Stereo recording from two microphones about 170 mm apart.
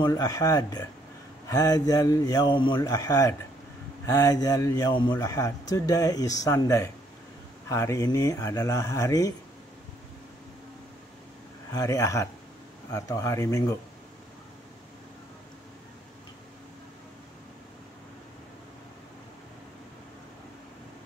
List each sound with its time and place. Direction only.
0.0 s a man's voice: 20° left (ahead or behind)
11.7 s a man's voice: 20° left (ahead or behind)